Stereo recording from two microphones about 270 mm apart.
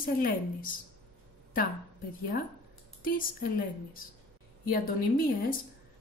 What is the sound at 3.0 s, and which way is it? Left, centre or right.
A woman's voice, left.